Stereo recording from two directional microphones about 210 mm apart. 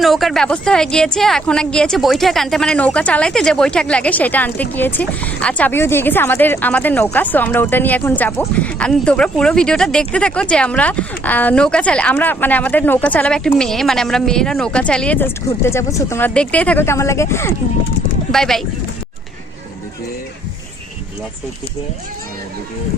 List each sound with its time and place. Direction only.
0.0 s a woman's voice: centre (ahead or behind)
18.3 s a woman's voice: centre (ahead or behind)